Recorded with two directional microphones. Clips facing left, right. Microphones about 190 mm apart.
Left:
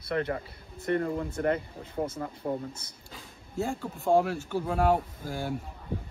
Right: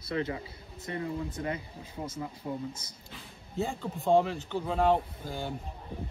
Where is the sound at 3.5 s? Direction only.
Centre (ahead or behind).